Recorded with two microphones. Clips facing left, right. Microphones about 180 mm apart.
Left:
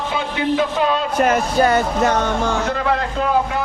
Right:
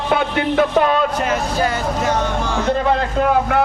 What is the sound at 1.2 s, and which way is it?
Speech, 55° left (ahead or behind).